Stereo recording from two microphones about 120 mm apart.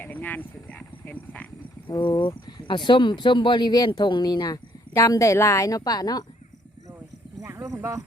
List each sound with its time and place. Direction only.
0.0 s speech: 15° left (ahead or behind)
1.9 s speech: 40° left (ahead or behind)
7.4 s horse: 25° right (ahead or behind)